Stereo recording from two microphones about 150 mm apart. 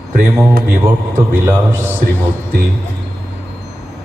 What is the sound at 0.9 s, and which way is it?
A man's voice, 15° right (ahead or behind).